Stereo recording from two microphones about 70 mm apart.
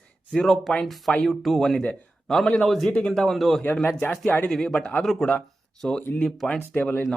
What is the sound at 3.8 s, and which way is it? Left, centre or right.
Speech, left.